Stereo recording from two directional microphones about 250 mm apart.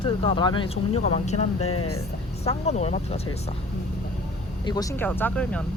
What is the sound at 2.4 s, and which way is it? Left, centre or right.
Speech, left.